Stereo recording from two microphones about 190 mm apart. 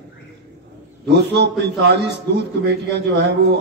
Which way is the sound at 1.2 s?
60° right (ahead or behind).